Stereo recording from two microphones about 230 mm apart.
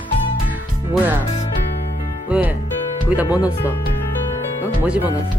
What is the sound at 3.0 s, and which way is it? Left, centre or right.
Speech, centre.